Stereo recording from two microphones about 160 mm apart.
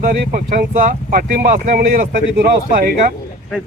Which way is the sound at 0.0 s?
60° right (ahead or behind).